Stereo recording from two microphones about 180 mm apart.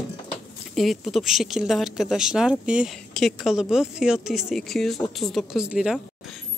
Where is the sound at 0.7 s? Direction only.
Centre (ahead or behind).